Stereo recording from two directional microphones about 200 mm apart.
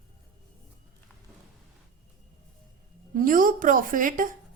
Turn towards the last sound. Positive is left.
turn(degrees=-40)  # may be behind; listen again after turning